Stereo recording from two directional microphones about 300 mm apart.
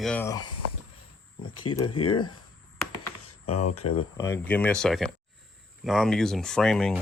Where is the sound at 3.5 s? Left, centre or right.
Left.